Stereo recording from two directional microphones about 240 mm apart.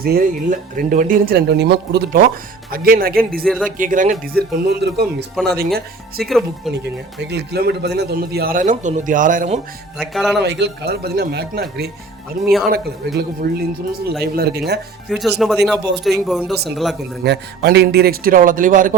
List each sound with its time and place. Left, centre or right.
0.0 s a man's voice: right
6.2 s speech: centre
6.8 s a man's voice: right
10.0 s speech: centre
10.3 s a man's voice: right
12.5 s speech: centre
13.1 s a man's voice: right
15.1 s speech: centre
17.2 s a man's voice: right